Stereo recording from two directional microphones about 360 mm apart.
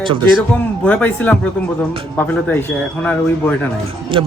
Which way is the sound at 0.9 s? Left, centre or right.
Centre.